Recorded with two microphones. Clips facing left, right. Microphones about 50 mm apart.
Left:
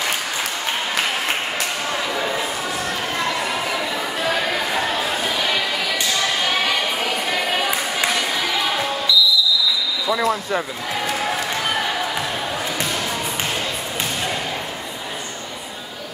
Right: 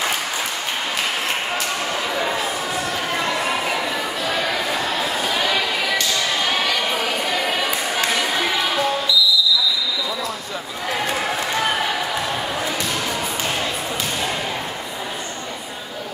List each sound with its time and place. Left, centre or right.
10.0 s speech: left